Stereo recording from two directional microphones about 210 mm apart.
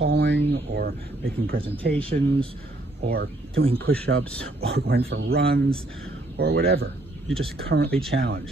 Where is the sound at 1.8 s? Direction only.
5° left (ahead or behind).